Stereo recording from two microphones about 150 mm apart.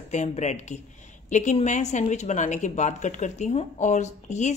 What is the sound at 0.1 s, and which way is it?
A woman's voice, 50° left (ahead or behind).